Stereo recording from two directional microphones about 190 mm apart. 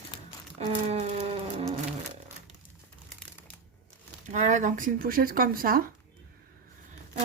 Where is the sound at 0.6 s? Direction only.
35° right (ahead or behind).